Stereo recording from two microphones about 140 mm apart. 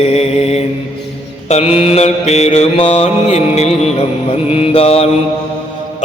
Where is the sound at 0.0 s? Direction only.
50° left (ahead or behind).